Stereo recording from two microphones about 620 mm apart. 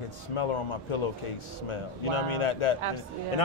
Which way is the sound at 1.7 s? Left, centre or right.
Left.